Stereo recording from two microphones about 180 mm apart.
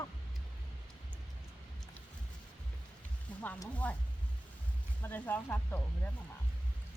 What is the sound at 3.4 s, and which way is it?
Speech, 10° left (ahead or behind).